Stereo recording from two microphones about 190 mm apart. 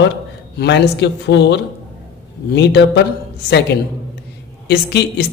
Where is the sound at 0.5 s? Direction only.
60° left (ahead or behind).